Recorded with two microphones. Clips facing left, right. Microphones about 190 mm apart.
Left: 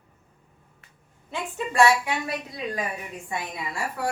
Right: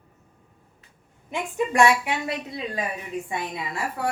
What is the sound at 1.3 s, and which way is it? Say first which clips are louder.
A woman's voice: right 5 dB; 15° right (ahead or behind).